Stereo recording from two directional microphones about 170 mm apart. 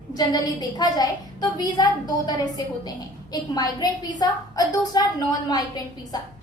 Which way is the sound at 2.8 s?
25° left (ahead or behind).